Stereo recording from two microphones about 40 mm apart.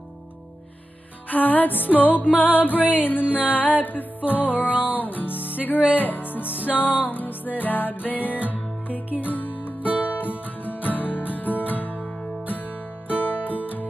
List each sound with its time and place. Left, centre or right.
1.3 s music: left
5.9 s speech: left
6.7 s music: left
13.1 s music: left